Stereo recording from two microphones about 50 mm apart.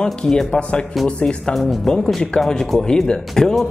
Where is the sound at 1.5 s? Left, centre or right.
Centre.